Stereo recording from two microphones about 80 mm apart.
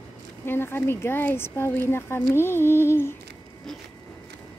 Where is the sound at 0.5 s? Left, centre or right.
Left.